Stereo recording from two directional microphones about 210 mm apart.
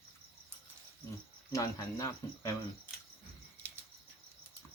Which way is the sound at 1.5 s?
15° left (ahead or behind).